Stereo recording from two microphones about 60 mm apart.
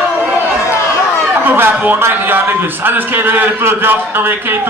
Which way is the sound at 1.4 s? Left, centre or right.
Right.